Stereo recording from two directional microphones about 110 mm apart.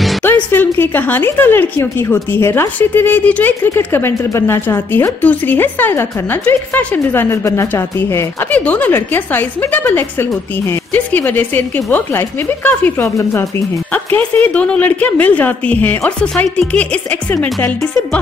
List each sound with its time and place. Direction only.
0.2 s a woman's voice: 20° left (ahead or behind)